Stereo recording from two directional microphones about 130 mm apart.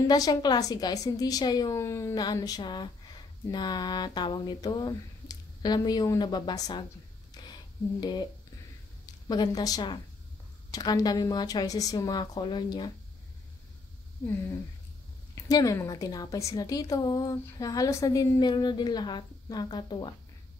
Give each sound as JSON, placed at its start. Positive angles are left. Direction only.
{"t": 0.1, "sound": "a woman's voice", "side_deg": 30}
{"t": 7.4, "sound": "a sound", "side_deg": 30}
{"t": 8.0, "sound": "a woman's voice", "side_deg": 35}
{"t": 15.3, "sound": "a woman's voice", "side_deg": 25}